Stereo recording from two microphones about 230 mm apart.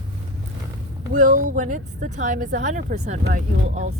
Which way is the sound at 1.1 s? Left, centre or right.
Right.